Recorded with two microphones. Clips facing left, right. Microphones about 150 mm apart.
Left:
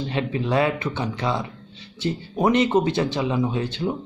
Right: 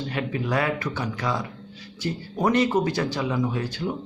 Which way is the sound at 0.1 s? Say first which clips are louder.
Left 3 dB; 25° left (ahead or behind).